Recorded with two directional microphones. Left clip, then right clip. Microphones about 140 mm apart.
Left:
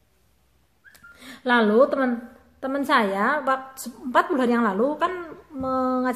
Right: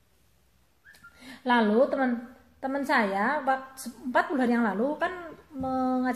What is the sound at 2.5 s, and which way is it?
A woman's voice, 30° left (ahead or behind).